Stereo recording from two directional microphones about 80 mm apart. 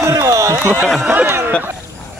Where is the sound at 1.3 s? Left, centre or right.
Right.